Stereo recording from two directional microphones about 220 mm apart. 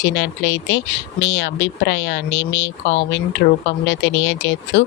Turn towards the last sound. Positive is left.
turn(degrees=55)  # may be behind; listen again after turning